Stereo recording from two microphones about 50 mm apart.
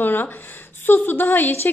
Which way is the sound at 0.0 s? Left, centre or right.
Left.